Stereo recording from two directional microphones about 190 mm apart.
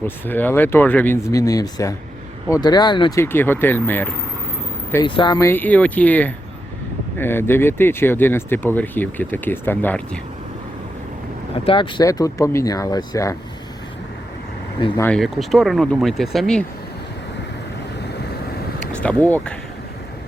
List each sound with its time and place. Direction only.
0.0 s speech: 10° left (ahead or behind)
3.2 s speech: 10° left (ahead or behind)
5.0 s speech: 25° left (ahead or behind)
11.6 s speech: 25° left (ahead or behind)
14.8 s speech: 25° left (ahead or behind)
15.0 s speech: 5° left (ahead or behind)
19.0 s speech: 5° left (ahead or behind)